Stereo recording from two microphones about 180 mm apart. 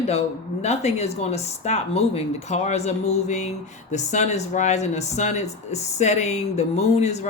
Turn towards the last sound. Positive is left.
turn(degrees=35)  # may be behind; listen again after turning